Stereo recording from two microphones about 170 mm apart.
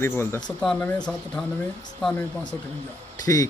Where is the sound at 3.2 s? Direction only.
20° left (ahead or behind).